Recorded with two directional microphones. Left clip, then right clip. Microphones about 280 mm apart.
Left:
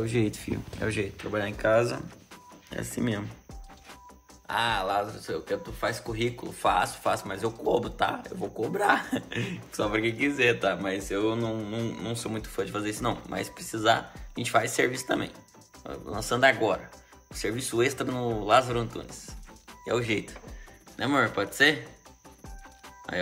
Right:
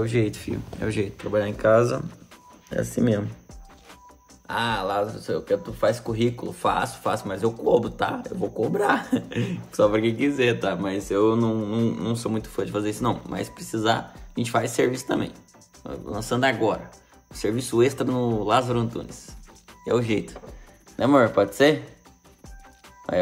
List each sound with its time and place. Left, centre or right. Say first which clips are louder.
0.0 s speech: right 4 dB; centre
4.5 s speech: right 2 dB; centre
23.1 s speech: right 8 dB; centre